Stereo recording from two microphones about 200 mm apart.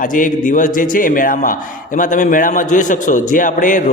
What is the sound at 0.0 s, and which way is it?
A man's voice, 40° left (ahead or behind).